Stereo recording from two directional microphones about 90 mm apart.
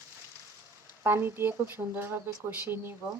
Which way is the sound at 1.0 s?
25° right (ahead or behind).